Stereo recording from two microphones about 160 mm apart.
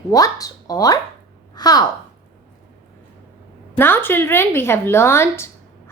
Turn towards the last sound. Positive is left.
turn(degrees=15)  # may be behind; listen again after turning